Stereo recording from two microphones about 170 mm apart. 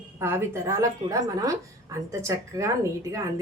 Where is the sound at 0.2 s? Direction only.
15° right (ahead or behind).